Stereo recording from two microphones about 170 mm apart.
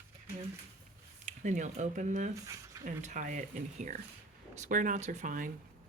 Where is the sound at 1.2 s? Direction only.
45° right (ahead or behind).